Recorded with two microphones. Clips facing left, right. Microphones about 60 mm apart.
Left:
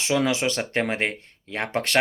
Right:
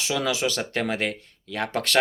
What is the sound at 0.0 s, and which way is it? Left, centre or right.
Speech, left.